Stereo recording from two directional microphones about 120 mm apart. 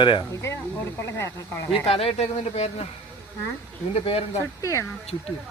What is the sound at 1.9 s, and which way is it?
Speech, 55° left (ahead or behind).